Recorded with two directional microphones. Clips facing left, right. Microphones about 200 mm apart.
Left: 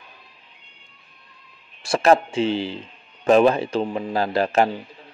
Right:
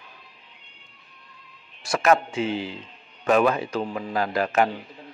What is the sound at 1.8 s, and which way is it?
A man's voice, 30° left (ahead or behind).